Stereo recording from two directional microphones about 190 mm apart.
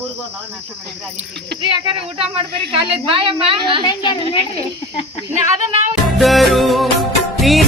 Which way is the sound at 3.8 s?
25° left (ahead or behind).